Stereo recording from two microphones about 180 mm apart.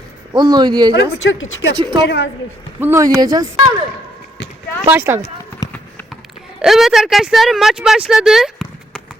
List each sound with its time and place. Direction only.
0.3 s speech: 25° right (ahead or behind)
1.3 s speech: 90° left
1.7 s speech: 25° right (ahead or behind)
2.0 s a woman's voice: 75° left (ahead or behind)
2.8 s speech: 15° right (ahead or behind)
4.9 s speech: 10° right (ahead or behind)
6.6 s speech: centre (ahead or behind)